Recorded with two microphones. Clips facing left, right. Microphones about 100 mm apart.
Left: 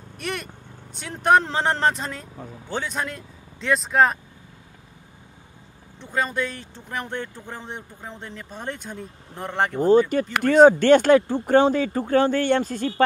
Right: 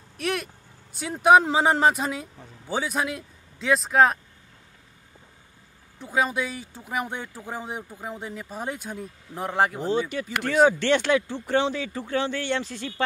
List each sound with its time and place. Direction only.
0.2 s speech: centre (ahead or behind)
5.9 s speech: 5° right (ahead or behind)
9.8 s speech: 45° left (ahead or behind)